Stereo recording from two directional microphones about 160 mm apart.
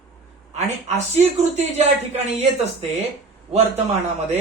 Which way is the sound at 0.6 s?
45° right (ahead or behind).